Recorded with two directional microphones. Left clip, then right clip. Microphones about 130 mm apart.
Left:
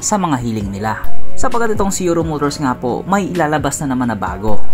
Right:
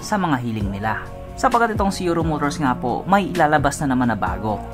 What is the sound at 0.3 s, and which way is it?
Speech, 45° left (ahead or behind).